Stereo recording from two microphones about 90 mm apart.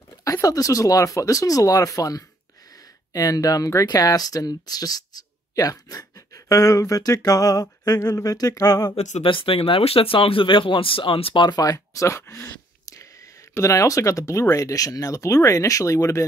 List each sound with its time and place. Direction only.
0.2 s speech: 40° left (ahead or behind)
9.2 s speech: 80° left
11.4 s speech: 50° left (ahead or behind)